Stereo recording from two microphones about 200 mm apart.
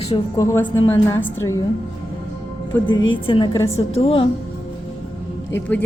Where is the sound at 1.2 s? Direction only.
70° left (ahead or behind).